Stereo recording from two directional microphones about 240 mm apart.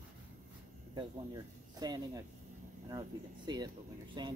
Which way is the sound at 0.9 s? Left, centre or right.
Centre.